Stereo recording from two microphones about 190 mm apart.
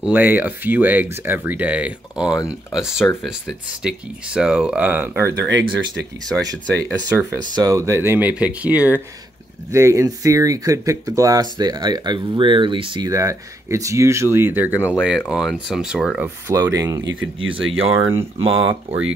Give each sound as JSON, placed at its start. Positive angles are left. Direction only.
{"t": 0.0, "sound": "speech", "side_deg": -10}
{"t": 16.4, "sound": "speech", "side_deg": -15}
{"t": 17.1, "sound": "speech", "side_deg": -90}
{"t": 17.8, "sound": "speech", "side_deg": -30}